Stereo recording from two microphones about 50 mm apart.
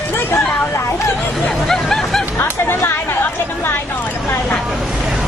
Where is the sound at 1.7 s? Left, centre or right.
Centre.